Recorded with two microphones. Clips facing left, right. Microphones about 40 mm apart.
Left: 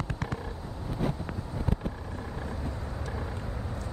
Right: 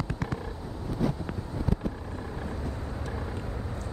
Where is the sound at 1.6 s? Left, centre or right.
Left.